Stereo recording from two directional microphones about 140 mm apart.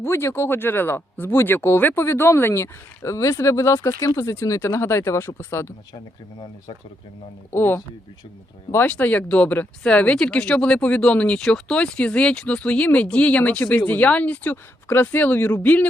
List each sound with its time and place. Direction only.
0.0 s speech: 20° left (ahead or behind)
7.5 s speech: 15° left (ahead or behind)